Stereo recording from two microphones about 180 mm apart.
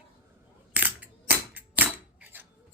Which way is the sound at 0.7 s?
10° right (ahead or behind).